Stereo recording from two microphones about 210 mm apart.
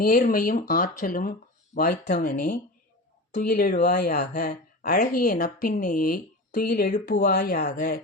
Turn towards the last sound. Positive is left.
turn(degrees=40)  # may be behind; listen again after turning